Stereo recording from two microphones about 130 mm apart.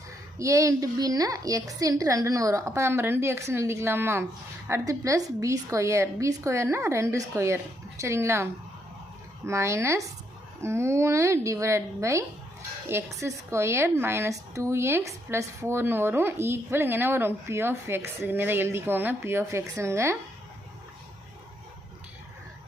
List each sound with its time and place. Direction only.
0.3 s speech: 25° right (ahead or behind)
9.5 s a woman's voice: 20° right (ahead or behind)